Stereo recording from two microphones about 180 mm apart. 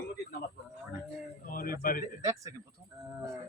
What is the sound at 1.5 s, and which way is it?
Speech, 50° left (ahead or behind).